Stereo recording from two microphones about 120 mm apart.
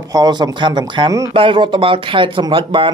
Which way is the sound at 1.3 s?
45° right (ahead or behind).